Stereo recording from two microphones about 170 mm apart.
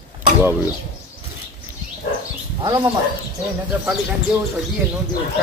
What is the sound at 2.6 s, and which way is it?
Speech, 30° right (ahead or behind).